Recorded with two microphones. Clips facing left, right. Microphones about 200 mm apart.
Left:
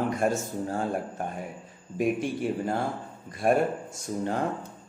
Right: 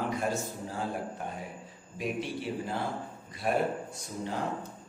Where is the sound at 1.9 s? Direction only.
50° left (ahead or behind).